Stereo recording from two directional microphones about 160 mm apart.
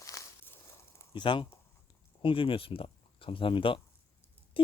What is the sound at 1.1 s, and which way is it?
Speech, 30° left (ahead or behind).